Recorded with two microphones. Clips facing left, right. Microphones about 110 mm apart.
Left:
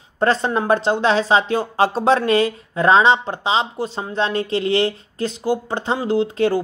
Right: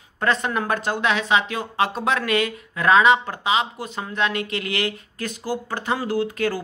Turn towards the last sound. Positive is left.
turn(degrees=25)  # may be behind; listen again after turning